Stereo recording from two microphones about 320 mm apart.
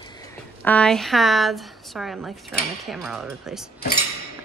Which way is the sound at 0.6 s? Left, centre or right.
Centre.